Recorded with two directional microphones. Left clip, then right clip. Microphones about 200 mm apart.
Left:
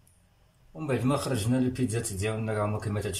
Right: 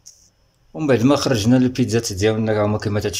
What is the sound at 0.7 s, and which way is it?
Speech, 50° right (ahead or behind).